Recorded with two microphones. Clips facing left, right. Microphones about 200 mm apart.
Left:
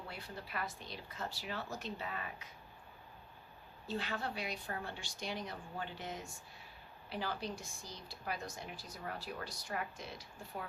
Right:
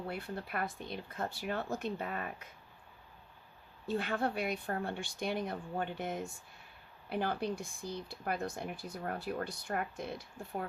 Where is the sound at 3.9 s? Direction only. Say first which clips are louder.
Right 6 dB; 55° right (ahead or behind).